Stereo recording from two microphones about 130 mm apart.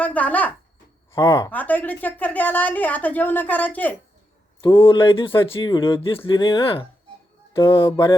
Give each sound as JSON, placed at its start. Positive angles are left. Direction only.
{"t": 0.0, "sound": "speech", "side_deg": 10}
{"t": 1.1, "sound": "a woman's voice", "side_deg": 25}
{"t": 4.6, "sound": "speech", "side_deg": 40}
{"t": 7.5, "sound": "speech", "side_deg": 20}
{"t": 7.9, "sound": "speech", "side_deg": 40}